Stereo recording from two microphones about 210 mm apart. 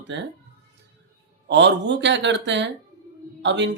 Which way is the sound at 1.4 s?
60° right (ahead or behind).